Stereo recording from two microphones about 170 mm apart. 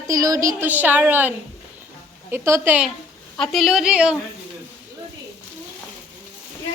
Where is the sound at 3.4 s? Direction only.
Centre (ahead or behind).